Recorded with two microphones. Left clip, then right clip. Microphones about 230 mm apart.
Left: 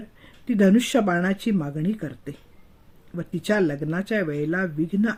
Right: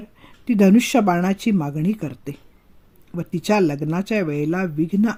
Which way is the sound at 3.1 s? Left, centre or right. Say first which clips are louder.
Right 4 dB; right.